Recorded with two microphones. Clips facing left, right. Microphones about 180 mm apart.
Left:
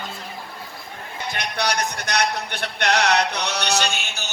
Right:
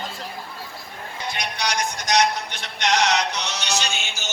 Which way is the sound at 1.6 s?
60° left (ahead or behind).